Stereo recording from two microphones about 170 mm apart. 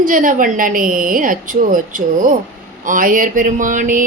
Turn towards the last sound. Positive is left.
turn(degrees=-50)  # may be behind; listen again after turning